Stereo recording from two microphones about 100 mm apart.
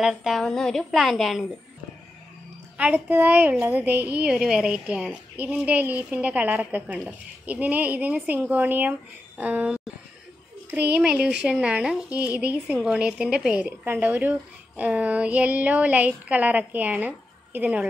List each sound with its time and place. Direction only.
0.0 s a woman's voice: 5° right (ahead or behind)
2.8 s a woman's voice: 15° right (ahead or behind)